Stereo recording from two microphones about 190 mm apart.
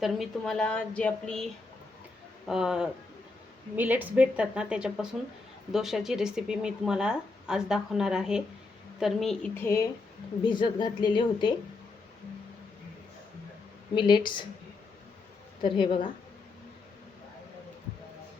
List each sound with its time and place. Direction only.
0.0 s speech: centre (ahead or behind)
2.5 s a woman's voice: centre (ahead or behind); by 11.5 s 25° left (ahead or behind)
13.9 s a woman's voice: 25° left (ahead or behind)
15.6 s a woman's voice: 25° left (ahead or behind)